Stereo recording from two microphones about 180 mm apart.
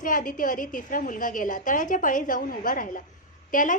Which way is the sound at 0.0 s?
50° left (ahead or behind).